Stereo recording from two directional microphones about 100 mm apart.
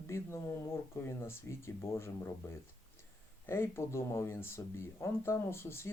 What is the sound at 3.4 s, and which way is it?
Speech, 25° left (ahead or behind).